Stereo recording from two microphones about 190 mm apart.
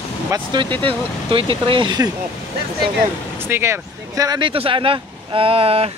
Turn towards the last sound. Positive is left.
turn(degrees=-30)  # may be behind; listen again after turning